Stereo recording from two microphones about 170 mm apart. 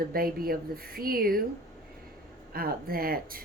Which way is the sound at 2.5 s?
60° right (ahead or behind).